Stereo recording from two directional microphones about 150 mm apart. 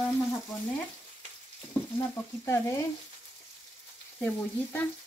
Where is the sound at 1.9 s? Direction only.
20° left (ahead or behind).